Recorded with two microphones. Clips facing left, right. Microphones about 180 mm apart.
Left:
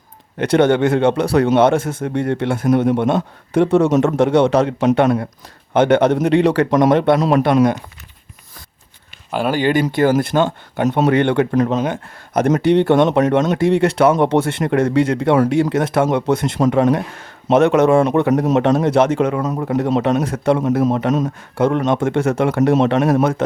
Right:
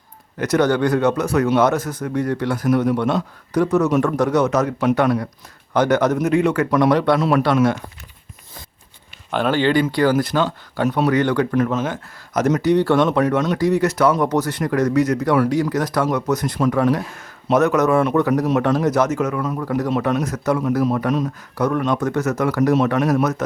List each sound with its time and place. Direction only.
0.3 s speech: 25° left (ahead or behind)
6.9 s speech: 20° left (ahead or behind)
9.3 s speech: 10° left (ahead or behind)
12.4 s speech: 50° left (ahead or behind)
12.6 s speech: 25° left (ahead or behind)
19.6 s speech: 25° left (ahead or behind)
21.1 s speech: 45° left (ahead or behind)
21.5 s speech: 25° left (ahead or behind)